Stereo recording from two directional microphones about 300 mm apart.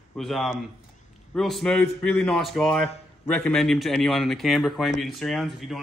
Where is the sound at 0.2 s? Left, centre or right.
Centre.